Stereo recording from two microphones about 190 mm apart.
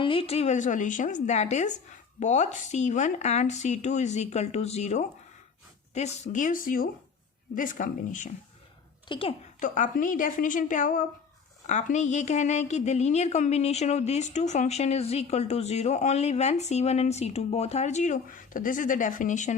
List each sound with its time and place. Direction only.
0.0 s a woman's voice: 30° left (ahead or behind); by 8.3 s 45° left (ahead or behind)
9.0 s a woman's voice: 25° left (ahead or behind)
9.6 s a woman's voice: 40° left (ahead or behind)